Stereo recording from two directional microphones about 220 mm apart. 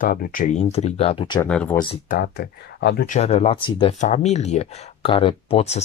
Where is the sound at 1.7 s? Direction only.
25° left (ahead or behind).